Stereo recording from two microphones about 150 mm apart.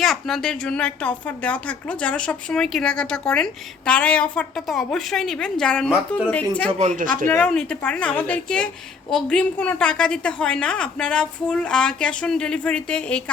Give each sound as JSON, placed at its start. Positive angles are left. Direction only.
{"t": 0.0, "sound": "a woman's voice", "side_deg": 0}
{"t": 6.7, "sound": "speech", "side_deg": -55}
{"t": 7.3, "sound": "a woman's voice", "side_deg": 10}